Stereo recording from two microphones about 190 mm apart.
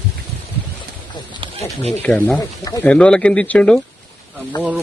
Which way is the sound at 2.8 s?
5° left (ahead or behind).